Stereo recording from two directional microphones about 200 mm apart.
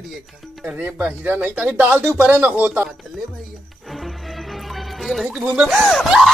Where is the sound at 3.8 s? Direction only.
Centre (ahead or behind).